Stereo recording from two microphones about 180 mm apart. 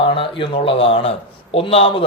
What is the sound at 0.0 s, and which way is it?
A man's voice, 30° left (ahead or behind).